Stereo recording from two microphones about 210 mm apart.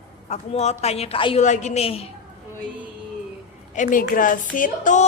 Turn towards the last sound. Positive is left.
turn(degrees=35)  # may be behind; listen again after turning